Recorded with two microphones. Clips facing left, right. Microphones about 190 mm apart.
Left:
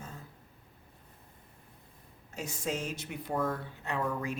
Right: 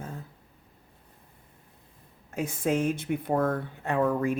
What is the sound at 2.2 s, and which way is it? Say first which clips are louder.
Speech: right 8 dB; 55° right (ahead or behind).